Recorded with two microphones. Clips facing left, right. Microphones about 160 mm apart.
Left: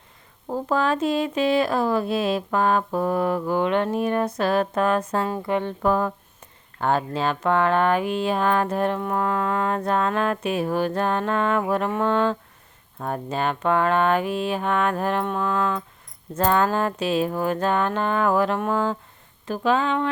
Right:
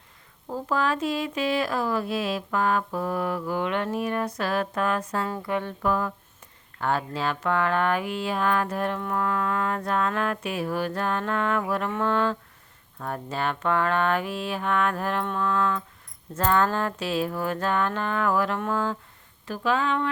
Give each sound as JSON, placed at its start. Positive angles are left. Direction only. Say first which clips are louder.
{"t": 0.7, "sound": "speech", "louder": "left 4 dB", "side_deg": 25}